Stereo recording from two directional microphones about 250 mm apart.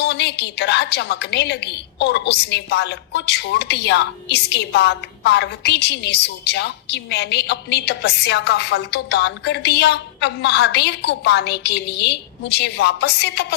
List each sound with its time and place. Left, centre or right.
0.0 s a woman's voice: left